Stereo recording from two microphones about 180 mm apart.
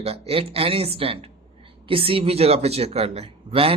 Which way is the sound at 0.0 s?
35° right (ahead or behind).